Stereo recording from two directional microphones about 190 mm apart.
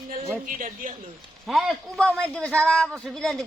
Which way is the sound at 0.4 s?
45° right (ahead or behind).